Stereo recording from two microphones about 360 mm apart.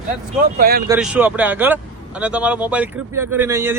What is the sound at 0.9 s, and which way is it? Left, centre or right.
Speech, centre.